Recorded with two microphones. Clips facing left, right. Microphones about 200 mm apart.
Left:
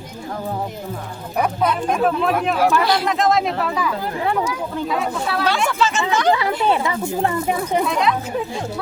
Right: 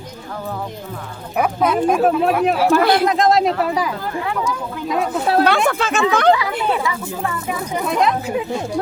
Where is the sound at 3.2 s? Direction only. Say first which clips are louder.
Right 3 dB; 40° right (ahead or behind).